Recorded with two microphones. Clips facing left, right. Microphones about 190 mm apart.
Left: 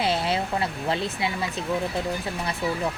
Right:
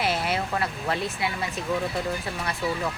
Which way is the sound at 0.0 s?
25° left (ahead or behind).